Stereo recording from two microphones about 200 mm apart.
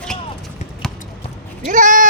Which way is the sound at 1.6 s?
40° right (ahead or behind).